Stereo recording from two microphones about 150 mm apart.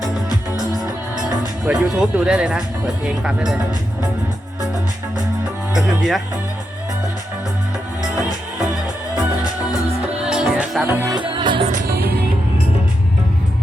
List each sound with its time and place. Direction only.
1.6 s speech: 5° right (ahead or behind)
5.7 s music: centre (ahead or behind)
10.2 s music: 5° right (ahead or behind)
10.8 s music: 15° right (ahead or behind)
11.3 s music: 35° right (ahead or behind)
11.9 s music: 90° right